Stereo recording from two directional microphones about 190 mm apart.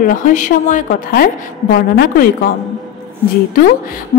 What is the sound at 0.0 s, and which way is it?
A woman's voice, 45° left (ahead or behind).